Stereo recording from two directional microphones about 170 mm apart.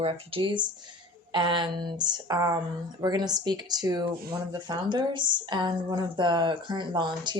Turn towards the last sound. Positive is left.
turn(degrees=-25)  # may be behind; listen again after turning